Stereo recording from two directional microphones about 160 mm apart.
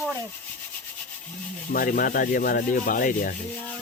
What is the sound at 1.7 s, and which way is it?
Rub, 60° left (ahead or behind).